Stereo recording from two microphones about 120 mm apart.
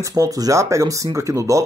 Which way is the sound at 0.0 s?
30° right (ahead or behind).